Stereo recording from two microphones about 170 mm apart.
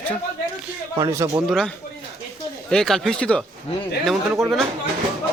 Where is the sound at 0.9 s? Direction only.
20° right (ahead or behind).